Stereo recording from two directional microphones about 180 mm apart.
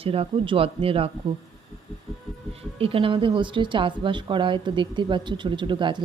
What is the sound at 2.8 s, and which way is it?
Speech, 30° right (ahead or behind).